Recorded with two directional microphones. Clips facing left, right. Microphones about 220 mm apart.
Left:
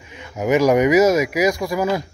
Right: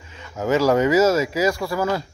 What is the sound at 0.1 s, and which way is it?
Speech, 15° left (ahead or behind).